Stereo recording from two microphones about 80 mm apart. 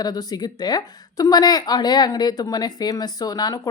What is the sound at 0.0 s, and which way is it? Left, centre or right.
Speech, left.